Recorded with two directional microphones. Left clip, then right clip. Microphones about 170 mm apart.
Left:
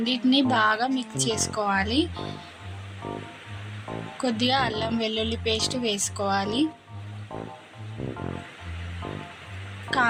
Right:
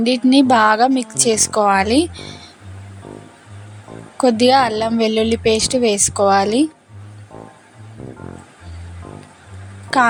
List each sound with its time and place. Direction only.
0.0 s a woman's voice: 45° right (ahead or behind)
4.2 s a woman's voice: 45° right (ahead or behind)
9.9 s a woman's voice: 45° right (ahead or behind)